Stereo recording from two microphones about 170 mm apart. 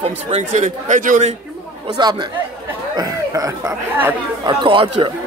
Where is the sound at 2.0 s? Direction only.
25° right (ahead or behind).